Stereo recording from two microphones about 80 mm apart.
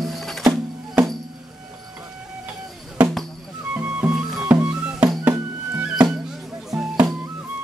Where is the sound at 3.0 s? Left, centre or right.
Centre.